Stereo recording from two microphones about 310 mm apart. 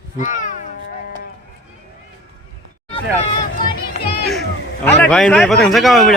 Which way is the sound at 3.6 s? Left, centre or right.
Left.